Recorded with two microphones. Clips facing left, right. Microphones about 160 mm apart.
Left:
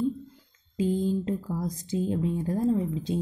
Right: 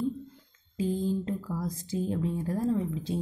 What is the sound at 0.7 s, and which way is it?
Speech, 20° left (ahead or behind).